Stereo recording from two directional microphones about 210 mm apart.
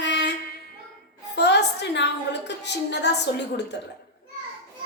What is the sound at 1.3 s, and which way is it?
A woman's voice, 55° left (ahead or behind).